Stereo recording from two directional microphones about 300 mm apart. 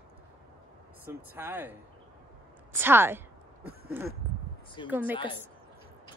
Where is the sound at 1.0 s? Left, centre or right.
Centre.